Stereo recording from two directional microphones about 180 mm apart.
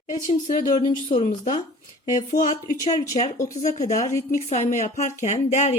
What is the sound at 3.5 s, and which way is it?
Speech, 45° left (ahead or behind).